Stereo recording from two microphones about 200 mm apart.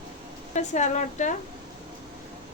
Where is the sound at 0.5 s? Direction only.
35° left (ahead or behind).